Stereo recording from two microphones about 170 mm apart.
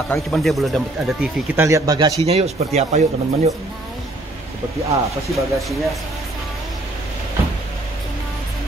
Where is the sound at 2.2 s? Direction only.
40° right (ahead or behind).